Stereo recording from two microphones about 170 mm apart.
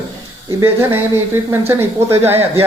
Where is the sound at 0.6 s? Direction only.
15° right (ahead or behind).